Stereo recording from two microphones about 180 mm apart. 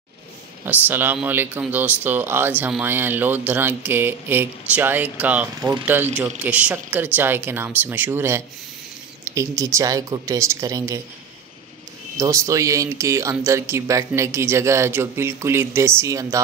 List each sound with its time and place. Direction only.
0.7 s speech: 10° right (ahead or behind)
5.6 s speech: 20° right (ahead or behind)
12.2 s speech: 15° right (ahead or behind)